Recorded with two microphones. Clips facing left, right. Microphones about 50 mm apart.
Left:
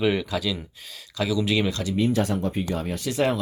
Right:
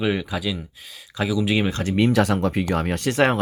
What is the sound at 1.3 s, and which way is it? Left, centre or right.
Speech, centre.